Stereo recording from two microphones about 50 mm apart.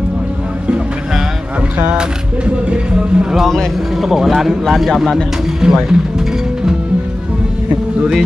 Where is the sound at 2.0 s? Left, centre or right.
Centre.